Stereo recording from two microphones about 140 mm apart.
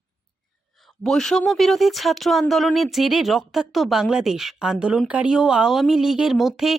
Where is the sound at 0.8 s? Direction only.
Centre (ahead or behind).